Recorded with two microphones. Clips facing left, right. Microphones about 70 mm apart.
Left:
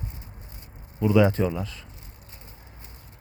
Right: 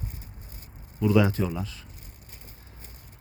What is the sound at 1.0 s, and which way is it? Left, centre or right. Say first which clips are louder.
Speech: left 2 dB; left.